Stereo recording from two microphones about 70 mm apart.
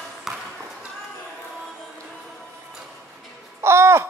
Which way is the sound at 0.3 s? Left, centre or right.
Centre.